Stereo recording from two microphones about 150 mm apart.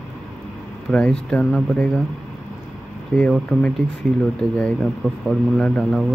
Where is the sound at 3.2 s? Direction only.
10° left (ahead or behind).